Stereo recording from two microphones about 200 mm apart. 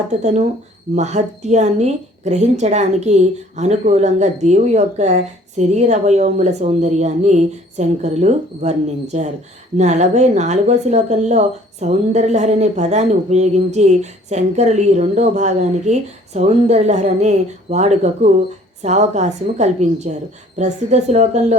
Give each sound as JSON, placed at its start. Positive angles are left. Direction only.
{"t": 0.2, "sound": "speech", "side_deg": -35}